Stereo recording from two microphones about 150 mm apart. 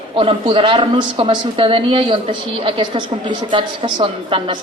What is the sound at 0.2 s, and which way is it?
A man's voice, 35° right (ahead or behind).